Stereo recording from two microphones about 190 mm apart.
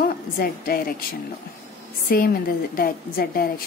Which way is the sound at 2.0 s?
50° left (ahead or behind).